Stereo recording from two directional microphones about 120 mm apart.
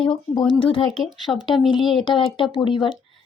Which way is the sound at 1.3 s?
10° left (ahead or behind).